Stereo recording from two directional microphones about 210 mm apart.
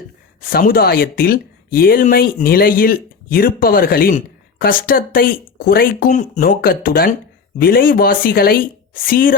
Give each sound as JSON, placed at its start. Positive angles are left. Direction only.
{"t": 0.4, "sound": "speech", "side_deg": 45}